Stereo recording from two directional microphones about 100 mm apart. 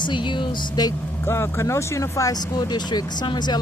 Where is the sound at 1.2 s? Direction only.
25° left (ahead or behind); by 3.5 s 50° left (ahead or behind).